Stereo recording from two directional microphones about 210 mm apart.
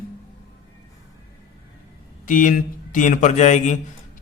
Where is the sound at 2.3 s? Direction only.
40° left (ahead or behind).